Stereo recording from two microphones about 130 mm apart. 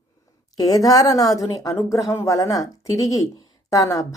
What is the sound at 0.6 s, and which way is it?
A woman's voice, 30° left (ahead or behind).